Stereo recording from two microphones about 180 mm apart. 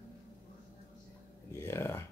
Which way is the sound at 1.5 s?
15° left (ahead or behind).